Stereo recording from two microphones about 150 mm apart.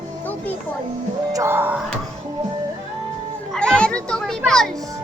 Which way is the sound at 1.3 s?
15° right (ahead or behind).